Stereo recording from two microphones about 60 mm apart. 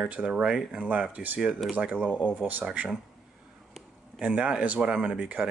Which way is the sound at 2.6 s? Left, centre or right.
Right.